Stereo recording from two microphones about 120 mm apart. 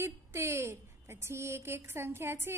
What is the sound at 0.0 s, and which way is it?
A woman's voice, 20° right (ahead or behind).